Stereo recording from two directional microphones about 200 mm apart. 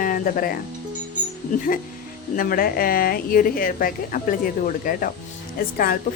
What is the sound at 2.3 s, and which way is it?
A woman's voice, 45° left (ahead or behind).